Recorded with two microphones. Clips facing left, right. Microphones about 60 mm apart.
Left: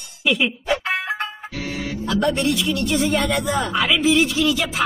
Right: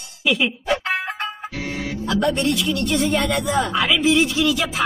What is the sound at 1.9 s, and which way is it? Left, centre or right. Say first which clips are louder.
Music: even; centre.